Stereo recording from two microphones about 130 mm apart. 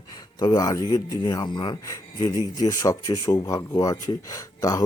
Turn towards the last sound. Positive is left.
turn(degrees=25)  # may be behind; listen again after turning